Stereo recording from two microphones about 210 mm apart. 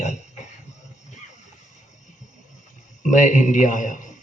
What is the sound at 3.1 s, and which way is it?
Speech, 35° left (ahead or behind).